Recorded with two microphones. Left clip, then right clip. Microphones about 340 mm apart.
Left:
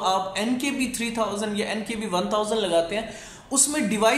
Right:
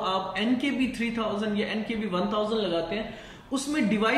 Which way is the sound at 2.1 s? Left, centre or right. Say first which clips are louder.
Left 4 dB; centre.